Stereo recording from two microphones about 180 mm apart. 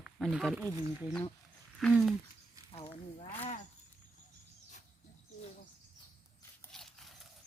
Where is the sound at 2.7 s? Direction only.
30° left (ahead or behind).